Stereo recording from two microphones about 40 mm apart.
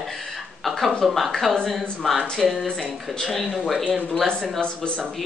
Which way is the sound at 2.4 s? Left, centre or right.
Centre.